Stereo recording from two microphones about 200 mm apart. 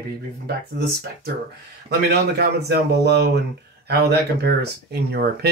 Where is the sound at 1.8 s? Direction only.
55° right (ahead or behind).